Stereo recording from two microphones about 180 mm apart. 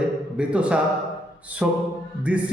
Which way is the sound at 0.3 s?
5° right (ahead or behind).